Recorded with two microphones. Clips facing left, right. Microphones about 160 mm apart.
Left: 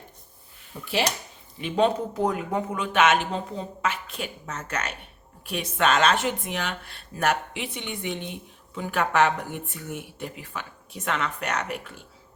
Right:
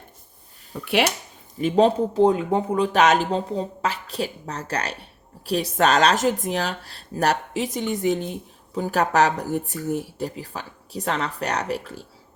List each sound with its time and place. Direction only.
0.7 s speech: 40° right (ahead or behind)